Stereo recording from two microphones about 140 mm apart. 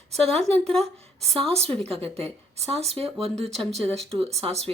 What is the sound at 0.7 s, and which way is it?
Speech, 50° right (ahead or behind).